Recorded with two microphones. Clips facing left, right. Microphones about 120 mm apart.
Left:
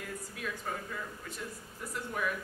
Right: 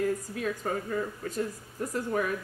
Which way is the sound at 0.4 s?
45° right (ahead or behind).